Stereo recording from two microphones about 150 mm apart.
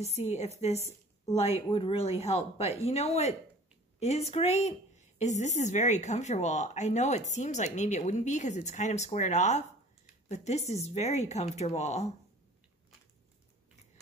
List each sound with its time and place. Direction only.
0.0 s speech: 45° left (ahead or behind)